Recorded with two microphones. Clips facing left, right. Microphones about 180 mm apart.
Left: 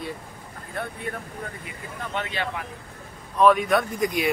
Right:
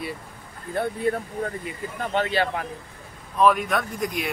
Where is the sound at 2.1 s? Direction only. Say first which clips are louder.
Right 6 dB; 35° right (ahead or behind).